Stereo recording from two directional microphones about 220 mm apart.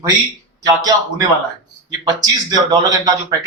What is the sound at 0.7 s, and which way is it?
A man's voice, 15° right (ahead or behind).